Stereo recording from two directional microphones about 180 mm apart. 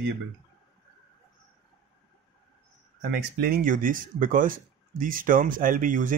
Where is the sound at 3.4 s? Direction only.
55° right (ahead or behind).